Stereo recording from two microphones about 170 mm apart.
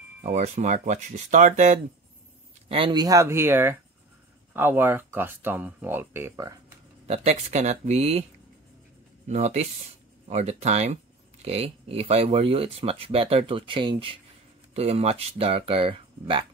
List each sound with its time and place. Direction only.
0.2 s speech: 40° right (ahead or behind)
2.7 s speech: 30° right (ahead or behind)
7.1 s speech: 40° right (ahead or behind)
9.3 s speech: 40° right (ahead or behind)